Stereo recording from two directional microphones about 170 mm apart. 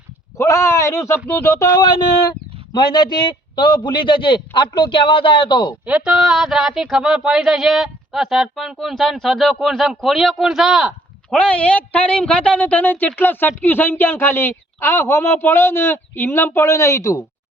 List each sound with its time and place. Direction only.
0.3 s a man's voice: 20° left (ahead or behind)
5.8 s speech: 10° right (ahead or behind); by 17.2 s 20° left (ahead or behind)